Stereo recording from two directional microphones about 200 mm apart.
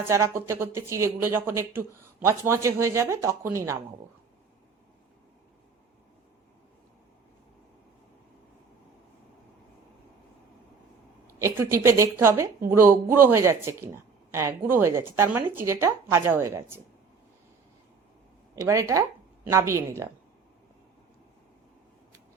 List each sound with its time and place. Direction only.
0.1 s speech: 15° right (ahead or behind)
11.3 s speech: 15° right (ahead or behind)
18.5 s speech: 15° right (ahead or behind)